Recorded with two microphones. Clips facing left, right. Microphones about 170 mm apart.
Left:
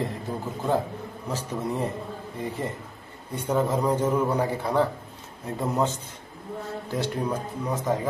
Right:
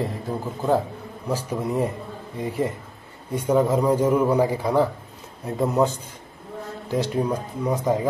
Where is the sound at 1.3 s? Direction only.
10° right (ahead or behind).